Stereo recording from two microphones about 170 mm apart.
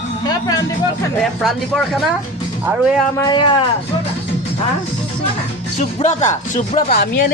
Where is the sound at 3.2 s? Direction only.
25° left (ahead or behind).